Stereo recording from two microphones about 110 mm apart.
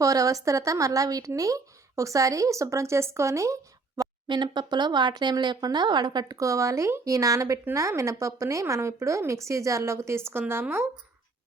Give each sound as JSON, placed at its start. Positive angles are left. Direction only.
{"t": 0.0, "sound": "a woman's voice", "side_deg": -30}
{"t": 4.3, "sound": "speech", "side_deg": -45}
{"t": 6.3, "sound": "speech", "side_deg": -30}